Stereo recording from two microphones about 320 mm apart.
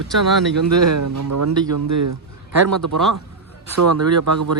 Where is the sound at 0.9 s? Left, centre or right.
Right.